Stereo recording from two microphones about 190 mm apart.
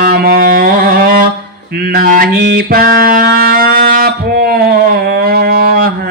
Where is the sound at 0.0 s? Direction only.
55° right (ahead or behind).